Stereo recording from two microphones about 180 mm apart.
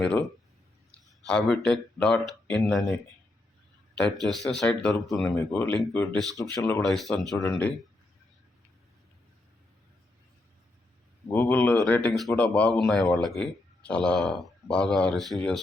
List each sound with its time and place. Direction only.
0.9 s speech: 5° left (ahead or behind)
3.9 s a man's voice: 5° left (ahead or behind)
6.6 s speech: 15° left (ahead or behind)
6.8 s a man's voice: centre (ahead or behind)
11.3 s a man's voice: 15° left (ahead or behind)